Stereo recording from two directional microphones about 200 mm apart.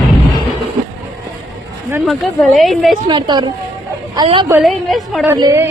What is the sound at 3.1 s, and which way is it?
A woman's voice, 20° right (ahead or behind).